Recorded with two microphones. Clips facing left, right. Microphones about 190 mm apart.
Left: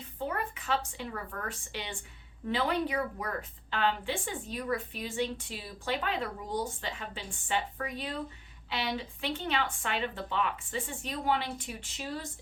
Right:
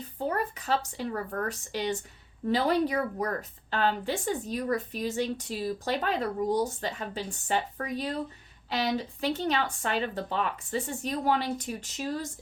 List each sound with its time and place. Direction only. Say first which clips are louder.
0.0 s a woman's voice: right 4 dB; 40° right (ahead or behind)